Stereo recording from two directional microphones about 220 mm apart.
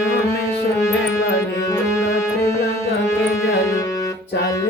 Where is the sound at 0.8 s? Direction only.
15° left (ahead or behind).